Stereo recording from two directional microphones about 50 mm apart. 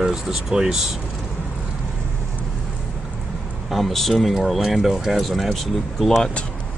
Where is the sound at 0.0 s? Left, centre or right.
Centre.